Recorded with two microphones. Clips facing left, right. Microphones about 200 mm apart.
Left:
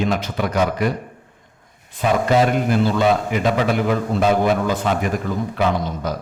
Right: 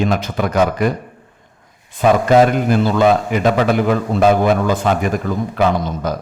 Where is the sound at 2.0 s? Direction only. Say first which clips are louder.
Right 5 dB; 50° right (ahead or behind).